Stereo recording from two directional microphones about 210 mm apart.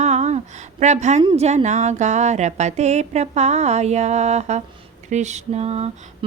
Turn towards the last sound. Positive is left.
turn(degrees=-30)  # may be behind; listen again after turning